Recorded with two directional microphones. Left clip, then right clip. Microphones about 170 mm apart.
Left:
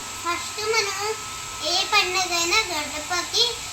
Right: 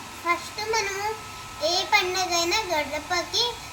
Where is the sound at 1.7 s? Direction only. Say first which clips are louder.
Left 2 dB; 10° right (ahead or behind).